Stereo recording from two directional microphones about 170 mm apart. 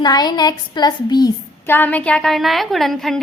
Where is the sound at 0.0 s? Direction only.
25° left (ahead or behind).